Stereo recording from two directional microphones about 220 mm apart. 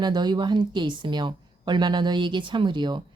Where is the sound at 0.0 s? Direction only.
20° right (ahead or behind).